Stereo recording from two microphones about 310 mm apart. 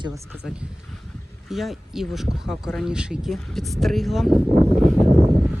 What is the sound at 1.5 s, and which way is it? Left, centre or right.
Speech, centre.